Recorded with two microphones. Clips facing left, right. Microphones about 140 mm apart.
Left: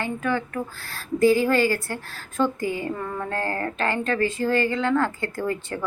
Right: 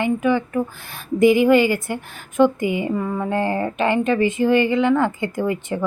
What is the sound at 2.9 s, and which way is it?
Speech, 10° right (ahead or behind).